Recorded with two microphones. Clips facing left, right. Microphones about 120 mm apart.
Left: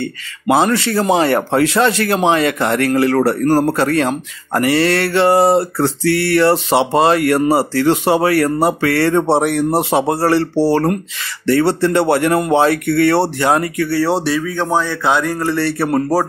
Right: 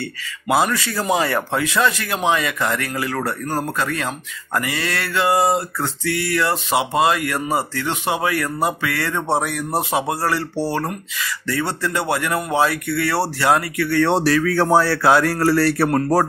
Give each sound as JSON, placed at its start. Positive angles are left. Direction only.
{"t": 0.5, "sound": "speech", "side_deg": 25}
{"t": 6.1, "sound": "a sound", "side_deg": 70}
{"t": 6.4, "sound": "speech", "side_deg": 30}
{"t": 12.7, "sound": "speech", "side_deg": 55}
{"t": 13.1, "sound": "speech", "side_deg": 20}
{"t": 13.8, "sound": "speech", "side_deg": 5}
{"t": 14.6, "sound": "speech", "side_deg": -10}